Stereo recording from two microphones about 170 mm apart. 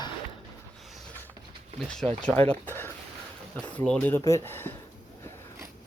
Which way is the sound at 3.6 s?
5° left (ahead or behind).